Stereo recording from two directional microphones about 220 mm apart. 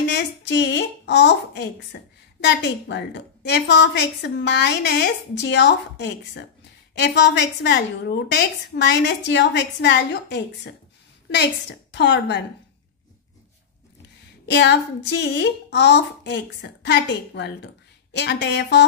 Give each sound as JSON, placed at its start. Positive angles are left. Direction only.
{"t": 0.0, "sound": "a woman's voice", "side_deg": 50}
{"t": 14.4, "sound": "a woman's voice", "side_deg": 50}